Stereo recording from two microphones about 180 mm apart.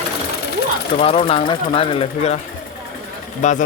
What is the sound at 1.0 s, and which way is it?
Speech, 30° left (ahead or behind).